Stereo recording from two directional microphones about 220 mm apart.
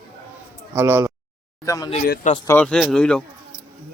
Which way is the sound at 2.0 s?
45° left (ahead or behind).